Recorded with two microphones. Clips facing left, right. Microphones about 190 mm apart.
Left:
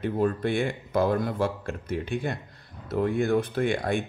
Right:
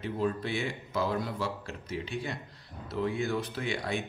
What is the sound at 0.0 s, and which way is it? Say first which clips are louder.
Speech: left 6 dB; 55° left (ahead or behind).